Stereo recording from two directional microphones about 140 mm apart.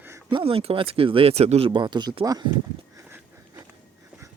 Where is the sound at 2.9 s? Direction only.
20° right (ahead or behind).